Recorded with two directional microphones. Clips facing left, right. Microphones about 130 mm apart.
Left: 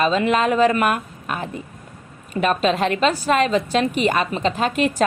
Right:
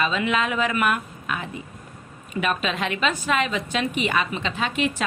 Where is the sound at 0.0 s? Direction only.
40° left (ahead or behind).